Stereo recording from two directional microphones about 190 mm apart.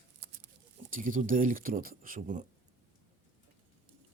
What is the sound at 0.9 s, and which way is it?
Speech, 45° right (ahead or behind).